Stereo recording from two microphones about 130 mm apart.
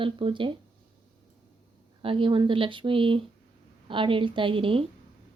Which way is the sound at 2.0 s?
40° right (ahead or behind).